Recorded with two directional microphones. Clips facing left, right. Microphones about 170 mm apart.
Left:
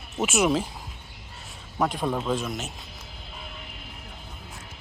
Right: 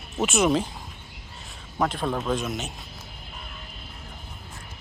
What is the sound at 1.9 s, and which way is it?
Speech, 10° left (ahead or behind).